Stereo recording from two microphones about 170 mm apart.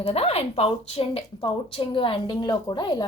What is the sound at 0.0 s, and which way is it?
Speech, 40° left (ahead or behind).